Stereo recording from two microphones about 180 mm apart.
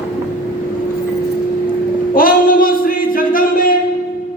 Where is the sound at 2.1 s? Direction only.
50° left (ahead or behind).